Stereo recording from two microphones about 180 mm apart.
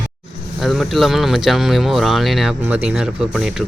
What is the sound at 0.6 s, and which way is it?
Speech, centre (ahead or behind).